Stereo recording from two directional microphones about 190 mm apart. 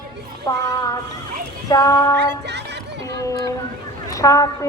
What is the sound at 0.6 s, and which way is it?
Child singing, 20° left (ahead or behind).